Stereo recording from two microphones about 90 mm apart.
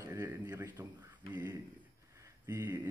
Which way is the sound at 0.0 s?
35° right (ahead or behind).